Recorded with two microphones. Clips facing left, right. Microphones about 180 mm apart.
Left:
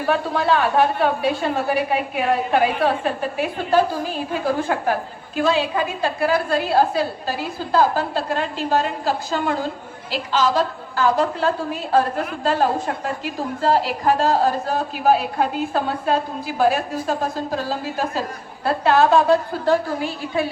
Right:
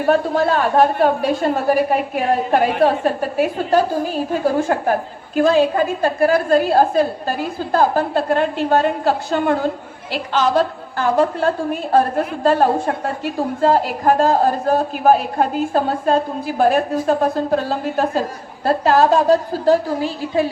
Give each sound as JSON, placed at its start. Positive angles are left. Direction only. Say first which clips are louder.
{"t": 0.1, "sound": "a woman's voice", "louder": "right 3 dB", "side_deg": -45}
{"t": 18.6, "sound": "a woman's voice", "louder": "right 2 dB", "side_deg": -40}